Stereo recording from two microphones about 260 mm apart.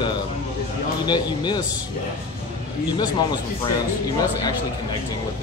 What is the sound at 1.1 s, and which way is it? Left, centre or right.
Speech, centre.